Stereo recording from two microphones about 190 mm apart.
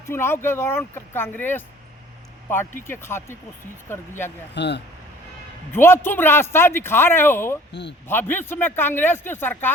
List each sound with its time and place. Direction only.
0.0 s speech: 15° left (ahead or behind)
2.8 s speech: 10° left (ahead or behind)
4.5 s speech: 65° left (ahead or behind)
5.7 s speech: 10° left (ahead or behind)
7.7 s speech: 65° left (ahead or behind)
8.0 s speech: 10° left (ahead or behind)